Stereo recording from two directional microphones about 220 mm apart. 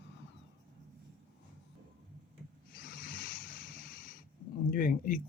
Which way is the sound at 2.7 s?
40° left (ahead or behind).